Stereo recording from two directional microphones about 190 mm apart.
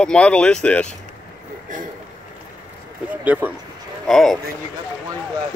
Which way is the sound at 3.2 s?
10° right (ahead or behind).